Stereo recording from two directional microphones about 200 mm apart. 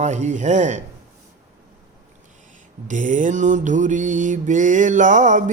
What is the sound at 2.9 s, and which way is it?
Mantra, 40° right (ahead or behind).